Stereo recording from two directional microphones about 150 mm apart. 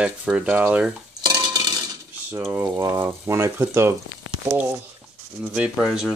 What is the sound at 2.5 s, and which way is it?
Speech, 15° right (ahead or behind).